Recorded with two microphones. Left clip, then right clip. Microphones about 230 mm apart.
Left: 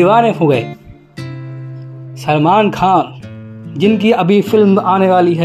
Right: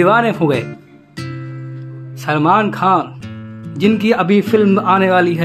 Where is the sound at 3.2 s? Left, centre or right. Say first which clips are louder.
Right 1 dB; centre.